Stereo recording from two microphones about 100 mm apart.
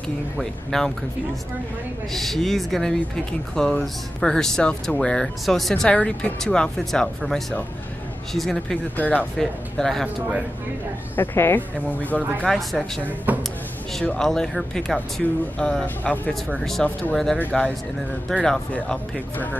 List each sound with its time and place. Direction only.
0.4 s speech: 5° left (ahead or behind)
2.1 s speech: 5° left (ahead or behind)
9.4 s speech: 5° left (ahead or behind)
11.1 s speech: 20° left (ahead or behind)
12.4 s speech: 5° left (ahead or behind)
13.3 s speech: 20° right (ahead or behind)
14.0 s speech: 5° left (ahead or behind)
18.4 s speech: 10° left (ahead or behind)